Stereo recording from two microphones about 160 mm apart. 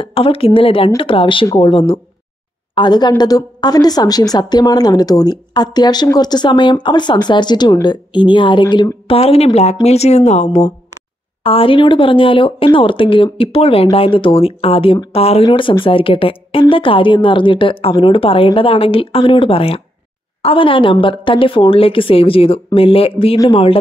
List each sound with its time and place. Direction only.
0.0 s a woman's voice: 35° left (ahead or behind)
11.4 s a woman's voice: 35° left (ahead or behind)